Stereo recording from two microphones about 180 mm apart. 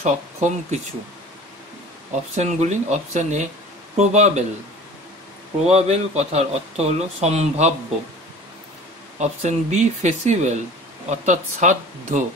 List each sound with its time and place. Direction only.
0.0 s a man's voice: 40° right (ahead or behind)
2.3 s a man's voice: 40° right (ahead or behind)
5.7 s a man's voice: 35° right (ahead or behind)
9.2 s a man's voice: 40° right (ahead or behind)